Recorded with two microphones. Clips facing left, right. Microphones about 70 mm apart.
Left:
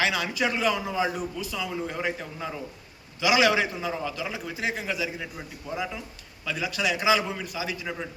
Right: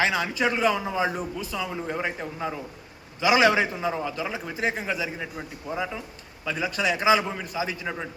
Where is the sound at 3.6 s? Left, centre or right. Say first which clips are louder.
Right 2 dB; centre.